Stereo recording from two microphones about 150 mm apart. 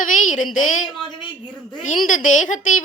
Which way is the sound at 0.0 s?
60° left (ahead or behind).